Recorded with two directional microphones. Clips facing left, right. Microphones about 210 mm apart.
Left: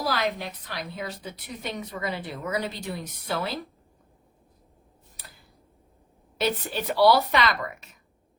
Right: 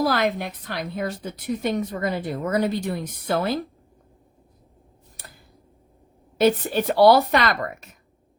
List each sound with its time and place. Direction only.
0.0 s a woman's voice: 50° right (ahead or behind)
6.4 s a woman's voice: 50° right (ahead or behind)